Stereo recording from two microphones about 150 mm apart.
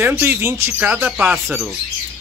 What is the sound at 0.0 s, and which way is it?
Speech, 15° right (ahead or behind).